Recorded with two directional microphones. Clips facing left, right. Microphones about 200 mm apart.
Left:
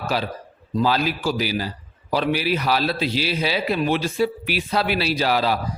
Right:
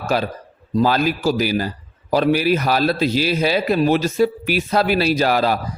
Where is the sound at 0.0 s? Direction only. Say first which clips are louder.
Right 4 dB; 45° right (ahead or behind).